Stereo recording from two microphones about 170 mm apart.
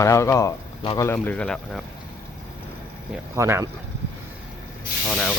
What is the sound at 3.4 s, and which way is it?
Speech, 15° right (ahead or behind).